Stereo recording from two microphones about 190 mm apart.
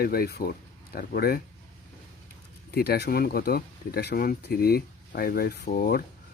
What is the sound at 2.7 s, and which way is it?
Speech, 55° left (ahead or behind).